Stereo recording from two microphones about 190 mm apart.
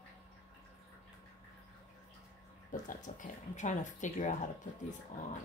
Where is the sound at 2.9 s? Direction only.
45° left (ahead or behind).